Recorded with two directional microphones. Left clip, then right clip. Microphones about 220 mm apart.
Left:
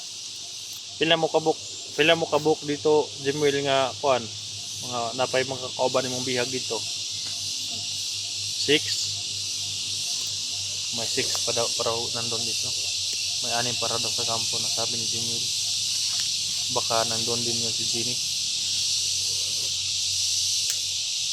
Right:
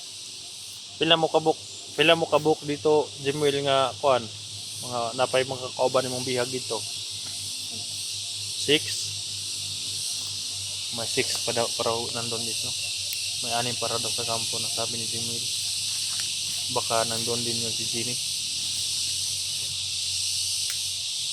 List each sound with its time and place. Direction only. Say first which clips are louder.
0.9 s speech: right 1 dB; 10° right (ahead or behind)
8.7 s speech: even; 10° right (ahead or behind)
11.2 s speech: right 1 dB; 30° right (ahead or behind)
13.4 s speech: even; centre (ahead or behind)
16.7 s speech: even; 5° left (ahead or behind)